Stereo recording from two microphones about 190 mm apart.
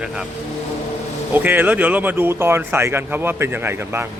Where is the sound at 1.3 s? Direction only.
10° right (ahead or behind).